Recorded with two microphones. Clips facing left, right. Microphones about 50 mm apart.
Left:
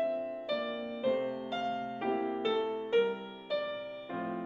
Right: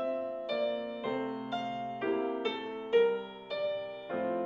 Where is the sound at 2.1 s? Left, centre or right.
Centre.